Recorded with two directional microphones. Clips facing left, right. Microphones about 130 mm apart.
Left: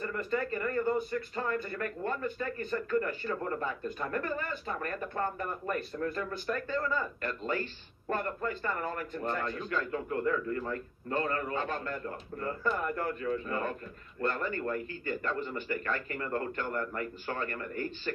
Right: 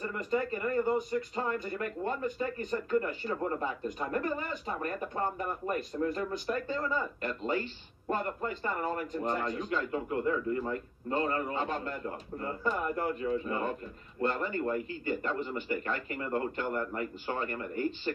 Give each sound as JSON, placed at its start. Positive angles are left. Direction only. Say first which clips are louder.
{"t": 0.0, "sound": "speech", "louder": "right 1 dB", "side_deg": -15}